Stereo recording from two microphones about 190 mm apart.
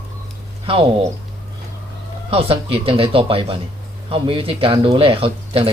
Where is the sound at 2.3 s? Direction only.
30° right (ahead or behind).